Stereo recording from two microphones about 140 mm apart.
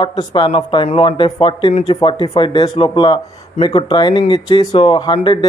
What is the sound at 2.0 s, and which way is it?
Speech, 35° left (ahead or behind).